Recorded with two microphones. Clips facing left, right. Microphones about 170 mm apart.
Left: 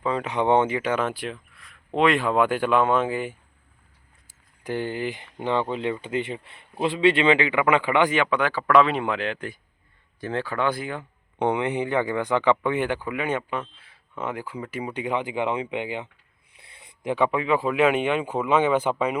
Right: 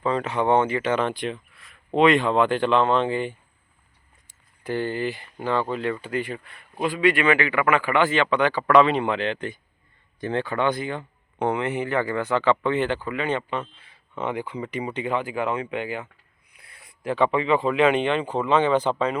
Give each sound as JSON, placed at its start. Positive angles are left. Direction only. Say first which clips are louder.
{"t": 0.0, "sound": "speech", "louder": "right 1 dB", "side_deg": 10}
{"t": 4.6, "sound": "speech", "louder": "right 2 dB", "side_deg": 15}
{"t": 16.6, "sound": "a sound", "louder": "left 1 dB", "side_deg": 25}
{"t": 17.2, "sound": "speech", "louder": "right 2 dB", "side_deg": 5}